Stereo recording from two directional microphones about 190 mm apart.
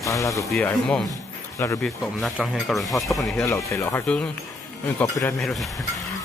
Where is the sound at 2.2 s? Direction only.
Centre (ahead or behind).